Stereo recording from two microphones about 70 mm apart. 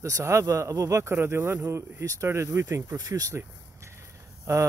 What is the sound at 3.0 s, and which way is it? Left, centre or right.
Speech, right.